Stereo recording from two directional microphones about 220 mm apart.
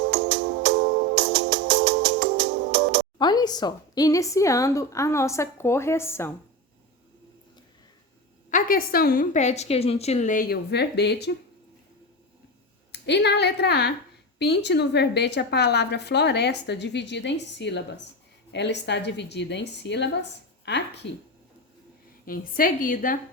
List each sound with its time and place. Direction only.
0.1 s music: 55° right (ahead or behind)
1.2 s music: 55° right (ahead or behind)
3.2 s a woman's voice: 20° left (ahead or behind)
8.4 s a woman's voice: 40° left (ahead or behind)
12.9 s a woman's voice: 50° left (ahead or behind)
22.3 s a woman's voice: 40° left (ahead or behind)